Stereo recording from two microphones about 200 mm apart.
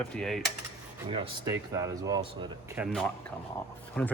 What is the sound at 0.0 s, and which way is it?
Speech, centre (ahead or behind).